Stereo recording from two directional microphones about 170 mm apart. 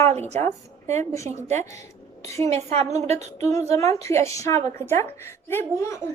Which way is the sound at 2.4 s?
40° right (ahead or behind).